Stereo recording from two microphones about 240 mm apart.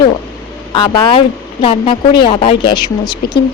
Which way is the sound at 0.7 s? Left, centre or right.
Centre.